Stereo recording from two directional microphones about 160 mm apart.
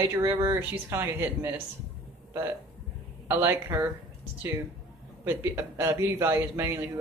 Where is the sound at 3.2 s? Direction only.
15° right (ahead or behind).